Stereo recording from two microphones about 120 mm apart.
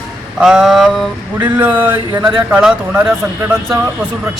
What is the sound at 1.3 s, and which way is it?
Speech, 15° right (ahead or behind).